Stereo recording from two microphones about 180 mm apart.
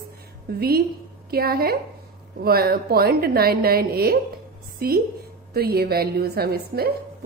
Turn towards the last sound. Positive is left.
turn(degrees=-60)  # may be behind; listen again after turning